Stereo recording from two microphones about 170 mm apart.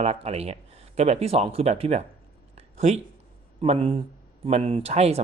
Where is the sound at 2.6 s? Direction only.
40° right (ahead or behind).